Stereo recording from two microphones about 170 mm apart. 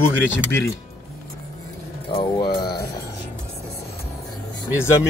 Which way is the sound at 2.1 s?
25° left (ahead or behind).